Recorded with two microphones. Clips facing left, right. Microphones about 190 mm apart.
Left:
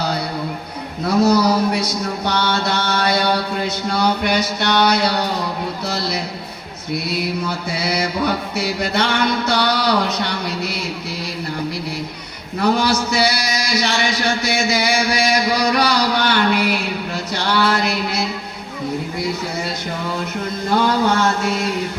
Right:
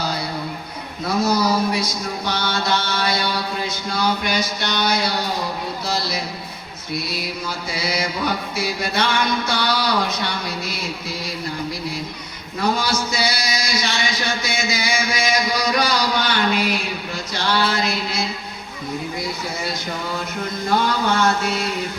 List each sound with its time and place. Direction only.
1.2 s a man's voice: 65° left (ahead or behind)
8.5 s a man's voice: 65° left (ahead or behind)
12.6 s a man's voice: 65° left (ahead or behind)